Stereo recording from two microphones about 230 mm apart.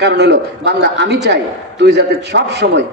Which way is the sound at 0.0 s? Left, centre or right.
Right.